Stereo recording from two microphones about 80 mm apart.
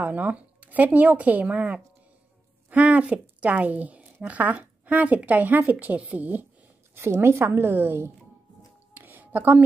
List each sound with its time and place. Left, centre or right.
0.0 s a woman's voice: right
7.0 s speech: right
8.9 s a sound: right